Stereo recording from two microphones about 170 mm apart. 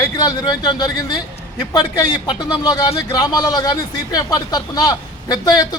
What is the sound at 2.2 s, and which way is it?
Speech, 25° left (ahead or behind).